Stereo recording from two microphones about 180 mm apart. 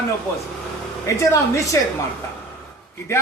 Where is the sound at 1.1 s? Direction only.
15° left (ahead or behind).